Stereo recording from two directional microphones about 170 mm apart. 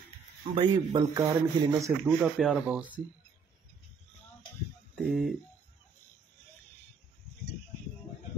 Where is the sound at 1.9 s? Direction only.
5° right (ahead or behind).